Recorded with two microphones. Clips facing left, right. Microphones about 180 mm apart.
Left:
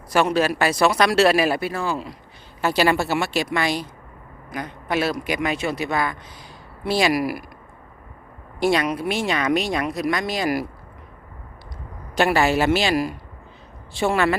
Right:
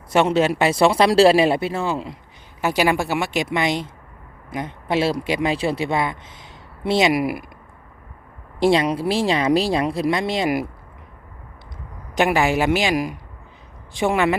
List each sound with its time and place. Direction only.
0.1 s speech: 25° right (ahead or behind)
8.5 s speech: 25° right (ahead or behind)
12.1 s speech: 15° right (ahead or behind)